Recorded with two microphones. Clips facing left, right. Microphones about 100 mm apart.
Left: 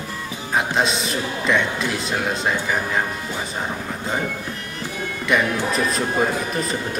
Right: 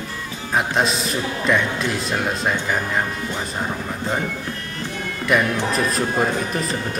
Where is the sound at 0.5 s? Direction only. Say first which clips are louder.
Right 1 dB; centre (ahead or behind).